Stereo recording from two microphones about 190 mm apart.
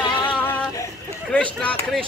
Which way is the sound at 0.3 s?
10° left (ahead or behind).